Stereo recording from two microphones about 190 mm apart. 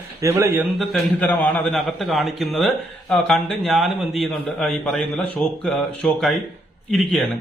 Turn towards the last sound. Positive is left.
turn(degrees=0)  # may be behind; listen again after turning